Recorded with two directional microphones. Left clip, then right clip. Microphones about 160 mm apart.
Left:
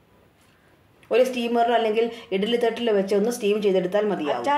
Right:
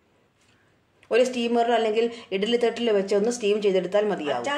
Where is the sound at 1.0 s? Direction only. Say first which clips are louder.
Left 1 dB; 5° right (ahead or behind).